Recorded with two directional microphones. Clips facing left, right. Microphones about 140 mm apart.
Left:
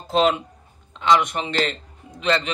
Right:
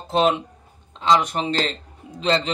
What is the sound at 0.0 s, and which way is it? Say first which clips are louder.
A man's voice: even; 25° right (ahead or behind).